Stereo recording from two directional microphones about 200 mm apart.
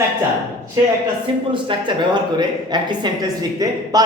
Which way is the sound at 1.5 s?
25° right (ahead or behind).